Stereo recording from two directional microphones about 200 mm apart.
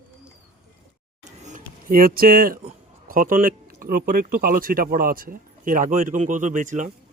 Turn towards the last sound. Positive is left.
turn(degrees=-40)  # may be behind; listen again after turning